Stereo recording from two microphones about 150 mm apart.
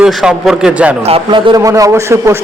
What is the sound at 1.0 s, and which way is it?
A man's voice, 35° right (ahead or behind).